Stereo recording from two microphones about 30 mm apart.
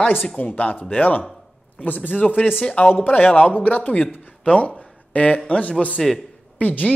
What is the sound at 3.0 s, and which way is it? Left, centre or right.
Speech, left.